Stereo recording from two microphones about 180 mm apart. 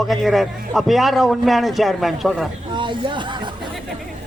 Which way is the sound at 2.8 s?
25° right (ahead or behind).